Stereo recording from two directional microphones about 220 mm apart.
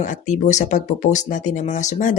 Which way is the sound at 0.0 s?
35° left (ahead or behind).